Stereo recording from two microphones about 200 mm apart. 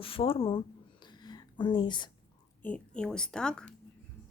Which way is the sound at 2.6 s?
5° left (ahead or behind).